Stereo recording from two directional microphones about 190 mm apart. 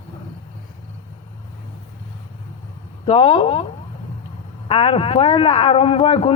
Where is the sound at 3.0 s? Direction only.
30° left (ahead or behind).